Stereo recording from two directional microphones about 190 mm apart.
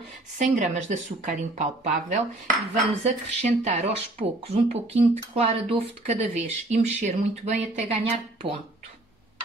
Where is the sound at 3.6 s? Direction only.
35° right (ahead or behind).